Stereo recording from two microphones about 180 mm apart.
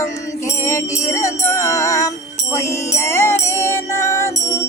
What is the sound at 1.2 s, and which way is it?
Music, 15° left (ahead or behind).